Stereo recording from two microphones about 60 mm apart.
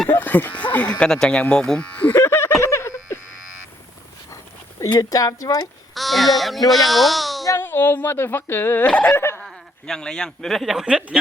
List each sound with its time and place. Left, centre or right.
0.1 s speech: left; by 1.9 s centre
2.1 s a sound: left
4.9 s speech: left
5.9 s a child's voice: centre
7.6 s speech: left
8.9 s a sound: centre
9.1 s laughter: left
9.4 s speech: centre
10.8 s speech: centre